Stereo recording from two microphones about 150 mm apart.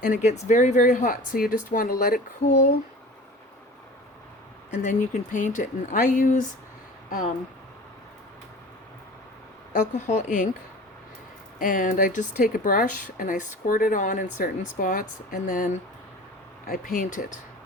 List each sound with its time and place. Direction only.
0.0 s speech: 55° left (ahead or behind); by 2.6 s 70° left (ahead or behind)
4.7 s speech: 55° left (ahead or behind)
9.7 s speech: 55° left (ahead or behind)
11.6 s speech: 65° left (ahead or behind)